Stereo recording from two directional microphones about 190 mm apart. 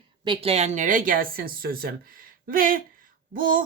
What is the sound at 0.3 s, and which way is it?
Speech, 30° right (ahead or behind).